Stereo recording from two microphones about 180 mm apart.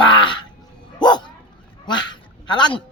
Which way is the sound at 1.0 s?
25° left (ahead or behind).